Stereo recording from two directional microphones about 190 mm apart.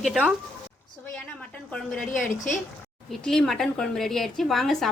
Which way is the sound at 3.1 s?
5° left (ahead or behind).